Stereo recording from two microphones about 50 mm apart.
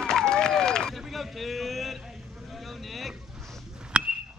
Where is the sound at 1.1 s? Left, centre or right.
Centre.